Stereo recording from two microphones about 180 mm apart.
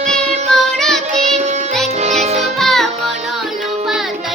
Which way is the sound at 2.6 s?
Centre (ahead or behind).